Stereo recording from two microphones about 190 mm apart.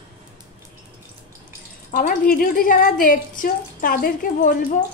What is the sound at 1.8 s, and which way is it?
A woman's voice, 45° left (ahead or behind).